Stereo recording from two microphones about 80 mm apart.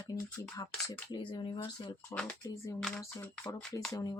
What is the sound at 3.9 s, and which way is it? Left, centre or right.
Speech, left.